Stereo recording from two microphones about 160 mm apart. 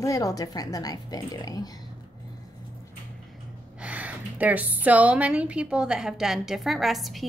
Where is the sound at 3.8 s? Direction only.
10° right (ahead or behind).